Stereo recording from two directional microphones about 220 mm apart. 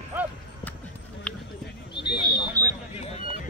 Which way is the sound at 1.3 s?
5° left (ahead or behind).